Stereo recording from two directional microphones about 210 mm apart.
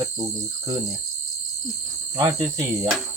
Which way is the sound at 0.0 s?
15° right (ahead or behind).